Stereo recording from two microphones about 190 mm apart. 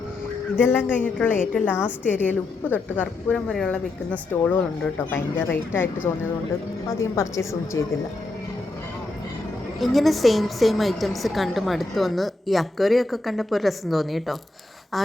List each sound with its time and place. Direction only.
0.5 s a woman's voice: 10° left (ahead or behind)
9.8 s a woman's voice: centre (ahead or behind)
14.9 s a sound: centre (ahead or behind)